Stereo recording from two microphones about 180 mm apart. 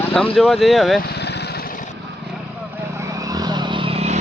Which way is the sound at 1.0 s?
65° left (ahead or behind).